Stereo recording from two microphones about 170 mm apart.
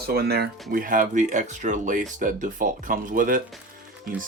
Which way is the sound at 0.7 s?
55° right (ahead or behind).